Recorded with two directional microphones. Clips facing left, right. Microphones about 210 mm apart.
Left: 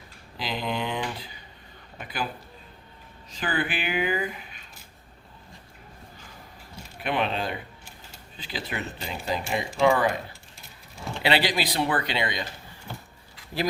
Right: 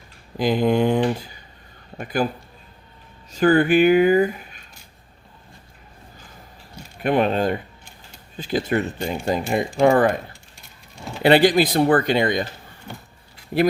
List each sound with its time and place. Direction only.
0.3 s speech: 50° right (ahead or behind)
3.3 s speech: 45° right (ahead or behind)
7.0 s speech: 45° right (ahead or behind)
11.2 s speech: 50° right (ahead or behind)
13.5 s speech: 60° right (ahead or behind)